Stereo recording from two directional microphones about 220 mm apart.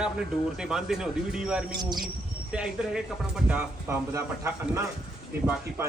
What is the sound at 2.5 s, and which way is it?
Speech, 5° right (ahead or behind).